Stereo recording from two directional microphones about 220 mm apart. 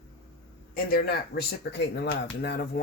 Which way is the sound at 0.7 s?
45° left (ahead or behind).